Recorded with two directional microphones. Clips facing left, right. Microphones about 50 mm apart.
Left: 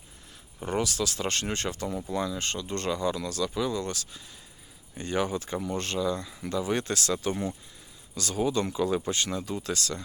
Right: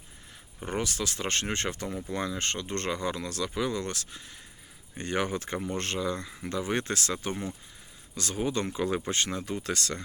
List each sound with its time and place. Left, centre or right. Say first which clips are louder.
0.7 s speech: left 3 dB; right